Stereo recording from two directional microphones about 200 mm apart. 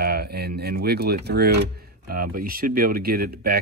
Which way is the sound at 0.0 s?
50° right (ahead or behind).